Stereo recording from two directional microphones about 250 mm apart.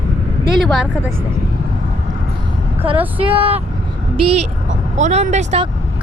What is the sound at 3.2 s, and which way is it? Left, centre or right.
Speech, right.